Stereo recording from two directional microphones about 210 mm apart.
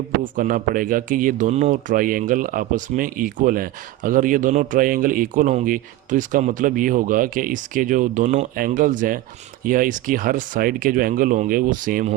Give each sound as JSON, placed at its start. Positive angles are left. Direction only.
{"t": 0.3, "sound": "speech", "side_deg": -40}